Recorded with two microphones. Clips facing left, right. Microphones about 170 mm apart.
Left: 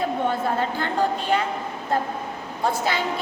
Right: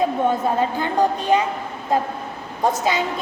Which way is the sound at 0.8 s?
15° right (ahead or behind).